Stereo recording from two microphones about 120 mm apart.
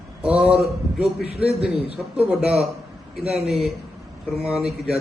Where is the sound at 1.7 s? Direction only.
55° right (ahead or behind).